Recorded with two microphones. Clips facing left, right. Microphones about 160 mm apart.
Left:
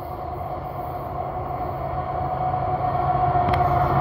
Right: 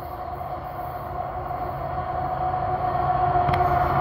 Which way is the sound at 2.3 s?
5° left (ahead or behind).